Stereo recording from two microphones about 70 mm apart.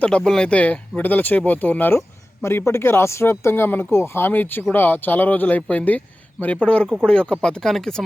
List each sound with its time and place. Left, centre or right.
0.2 s speech: centre; by 2.0 s left
2.4 s speech: left; by 8.0 s centre